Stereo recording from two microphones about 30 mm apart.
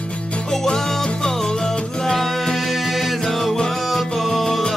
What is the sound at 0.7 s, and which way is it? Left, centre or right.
Music, centre.